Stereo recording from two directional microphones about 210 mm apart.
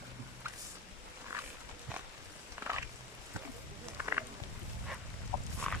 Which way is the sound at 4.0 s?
10° right (ahead or behind).